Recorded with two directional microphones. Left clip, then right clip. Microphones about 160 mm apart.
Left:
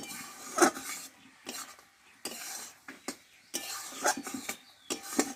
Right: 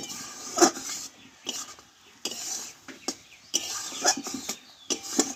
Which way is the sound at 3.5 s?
15° left (ahead or behind).